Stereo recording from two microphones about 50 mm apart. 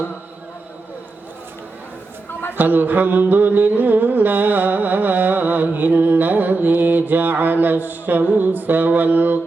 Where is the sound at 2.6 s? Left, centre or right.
Right.